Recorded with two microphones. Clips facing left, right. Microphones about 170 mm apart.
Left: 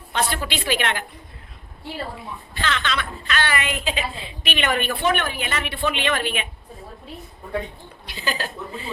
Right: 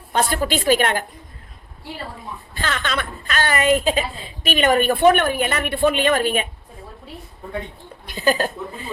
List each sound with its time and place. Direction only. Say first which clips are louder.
0.1 s a woman's voice: right 5 dB; 45° right (ahead or behind)
2.6 s a woman's voice: right 1 dB; 45° right (ahead or behind)
8.0 s a woman's voice: right 9 dB; 45° right (ahead or behind)